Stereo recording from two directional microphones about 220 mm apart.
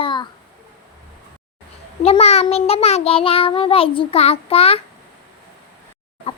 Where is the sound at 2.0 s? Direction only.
30° left (ahead or behind).